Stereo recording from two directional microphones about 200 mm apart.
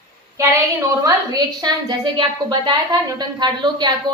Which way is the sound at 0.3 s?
15° right (ahead or behind).